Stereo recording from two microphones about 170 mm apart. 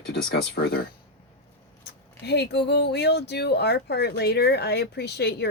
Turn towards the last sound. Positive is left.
turn(degrees=75)  # may be behind; listen again after turning